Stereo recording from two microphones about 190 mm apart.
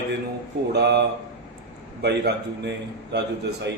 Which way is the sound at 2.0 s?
65° right (ahead or behind).